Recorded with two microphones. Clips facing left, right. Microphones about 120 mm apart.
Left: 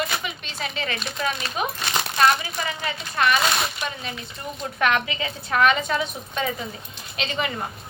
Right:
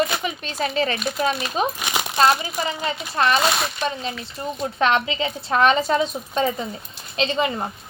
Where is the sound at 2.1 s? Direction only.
30° right (ahead or behind).